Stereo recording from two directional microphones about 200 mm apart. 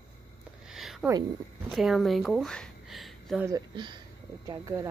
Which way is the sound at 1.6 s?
Centre (ahead or behind).